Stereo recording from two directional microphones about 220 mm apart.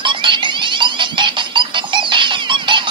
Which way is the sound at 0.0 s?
20° right (ahead or behind).